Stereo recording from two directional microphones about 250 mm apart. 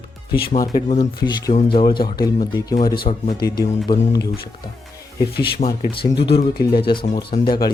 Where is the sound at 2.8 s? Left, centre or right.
Left.